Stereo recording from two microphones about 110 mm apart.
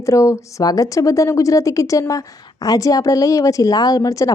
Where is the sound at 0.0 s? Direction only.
30° left (ahead or behind).